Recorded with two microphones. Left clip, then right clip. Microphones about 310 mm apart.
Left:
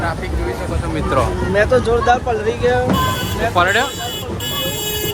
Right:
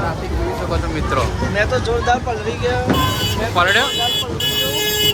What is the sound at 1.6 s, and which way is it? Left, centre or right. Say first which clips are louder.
Speech: left 4 dB; left.